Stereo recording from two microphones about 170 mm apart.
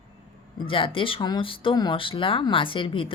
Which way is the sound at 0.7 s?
30° left (ahead or behind).